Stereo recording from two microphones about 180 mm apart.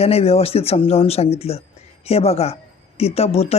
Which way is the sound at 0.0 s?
35° left (ahead or behind).